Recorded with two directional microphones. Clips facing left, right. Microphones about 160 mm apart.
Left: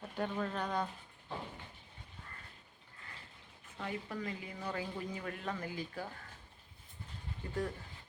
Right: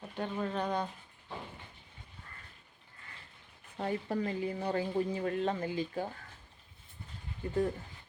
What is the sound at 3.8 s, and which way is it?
Speech, 40° right (ahead or behind).